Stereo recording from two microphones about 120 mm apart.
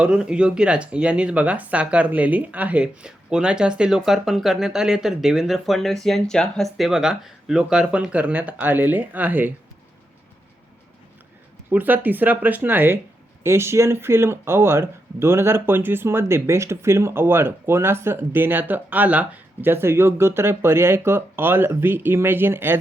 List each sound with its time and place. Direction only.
0.0 s speech: 5° right (ahead or behind)
11.7 s speech: 15° right (ahead or behind)